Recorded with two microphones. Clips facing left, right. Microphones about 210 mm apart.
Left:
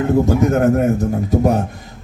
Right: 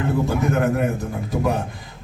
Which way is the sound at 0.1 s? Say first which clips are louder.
Left 7 dB; 40° left (ahead or behind).